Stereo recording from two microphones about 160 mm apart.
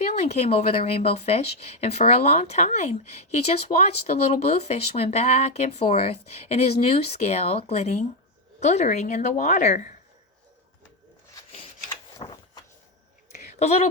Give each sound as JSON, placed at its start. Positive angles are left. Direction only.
{"t": 0.1, "sound": "speech", "side_deg": 45}
{"t": 12.2, "sound": "vehicle", "side_deg": 35}
{"t": 13.3, "sound": "a sound", "side_deg": 40}